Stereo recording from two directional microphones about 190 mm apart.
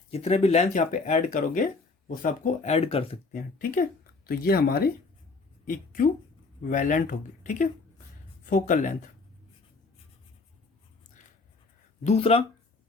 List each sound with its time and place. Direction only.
0.1 s speech: 30° left (ahead or behind)
3.3 s a woman's voice: 45° left (ahead or behind)
12.0 s speech: 30° left (ahead or behind)